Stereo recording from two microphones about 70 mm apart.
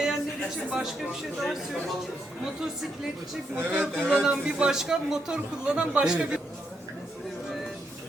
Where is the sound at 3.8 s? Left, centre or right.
Centre.